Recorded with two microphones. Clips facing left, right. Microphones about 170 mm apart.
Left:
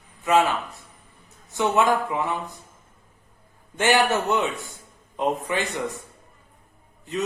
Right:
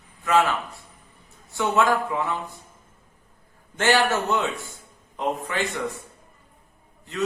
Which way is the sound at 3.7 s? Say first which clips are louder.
Left 1 dB; 15° left (ahead or behind).